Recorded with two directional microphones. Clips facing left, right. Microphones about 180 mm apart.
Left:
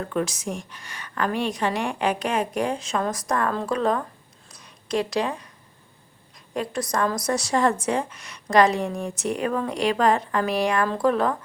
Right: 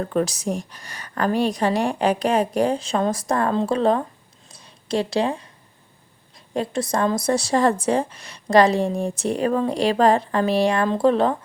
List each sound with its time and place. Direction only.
0.0 s speech: 35° right (ahead or behind)
4.4 s a sound: 30° right (ahead or behind)
6.5 s speech: 30° right (ahead or behind)